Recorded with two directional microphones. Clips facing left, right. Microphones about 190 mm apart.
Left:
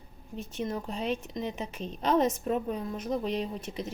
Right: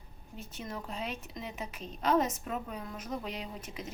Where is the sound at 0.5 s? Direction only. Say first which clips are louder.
Left 7 dB; 30° left (ahead or behind).